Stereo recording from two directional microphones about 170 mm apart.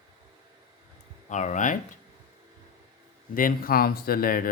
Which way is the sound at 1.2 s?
45° left (ahead or behind).